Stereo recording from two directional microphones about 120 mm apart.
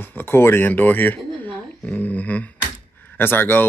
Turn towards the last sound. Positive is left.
turn(degrees=15)  # may be behind; listen again after turning